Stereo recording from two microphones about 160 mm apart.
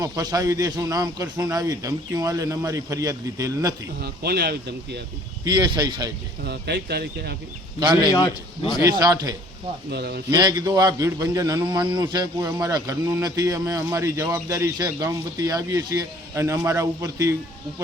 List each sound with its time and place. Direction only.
0.0 s a man's voice: 25° right (ahead or behind)
4.0 s speech: 80° right
5.5 s a man's voice: 25° right (ahead or behind)
6.4 s speech: 90° right
7.8 s a man's voice: 25° right (ahead or behind)
8.1 s a man's voice: 25° left (ahead or behind)
8.8 s a man's voice: 20° right (ahead or behind)
9.9 s speech: 90° right
10.3 s a man's voice: 25° right (ahead or behind)